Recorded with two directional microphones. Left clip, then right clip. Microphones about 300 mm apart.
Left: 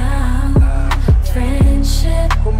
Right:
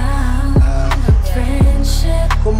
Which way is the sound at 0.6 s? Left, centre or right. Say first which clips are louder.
Right 2 dB; centre.